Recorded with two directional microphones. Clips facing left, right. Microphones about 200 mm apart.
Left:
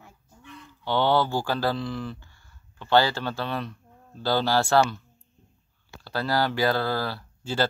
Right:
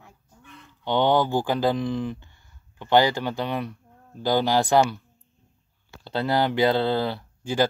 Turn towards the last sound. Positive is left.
turn(degrees=-15)  # may be behind; listen again after turning